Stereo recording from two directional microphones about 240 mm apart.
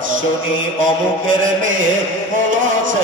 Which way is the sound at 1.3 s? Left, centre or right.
Right.